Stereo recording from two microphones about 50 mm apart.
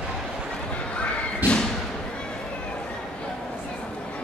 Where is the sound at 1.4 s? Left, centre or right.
Right.